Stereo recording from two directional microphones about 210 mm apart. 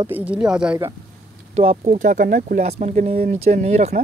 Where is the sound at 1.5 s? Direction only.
30° right (ahead or behind).